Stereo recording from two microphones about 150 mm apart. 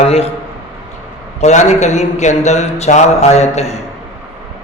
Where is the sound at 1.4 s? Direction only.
50° left (ahead or behind).